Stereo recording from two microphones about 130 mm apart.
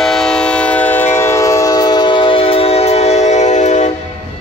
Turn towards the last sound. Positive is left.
turn(degrees=65)  # may be behind; listen again after turning